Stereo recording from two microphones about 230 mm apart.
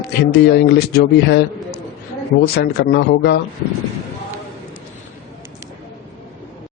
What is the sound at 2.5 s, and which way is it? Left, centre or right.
Speech, left.